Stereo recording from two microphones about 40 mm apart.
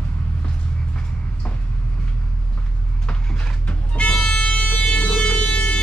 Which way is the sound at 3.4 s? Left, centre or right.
Left.